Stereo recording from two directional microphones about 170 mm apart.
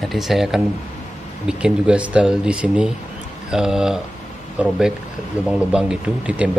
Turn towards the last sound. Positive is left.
turn(degrees=-10)  # may be behind; listen again after turning